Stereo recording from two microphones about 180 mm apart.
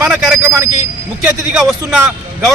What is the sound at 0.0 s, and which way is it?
A man's voice, 5° right (ahead or behind).